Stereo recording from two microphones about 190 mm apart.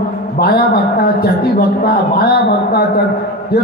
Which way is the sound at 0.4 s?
55° left (ahead or behind).